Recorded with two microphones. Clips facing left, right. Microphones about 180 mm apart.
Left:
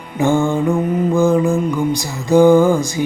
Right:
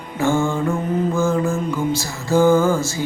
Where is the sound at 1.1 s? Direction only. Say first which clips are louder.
Left 5 dB; 15° left (ahead or behind).